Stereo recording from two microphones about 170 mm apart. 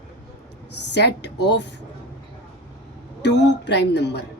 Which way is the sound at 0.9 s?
90° left.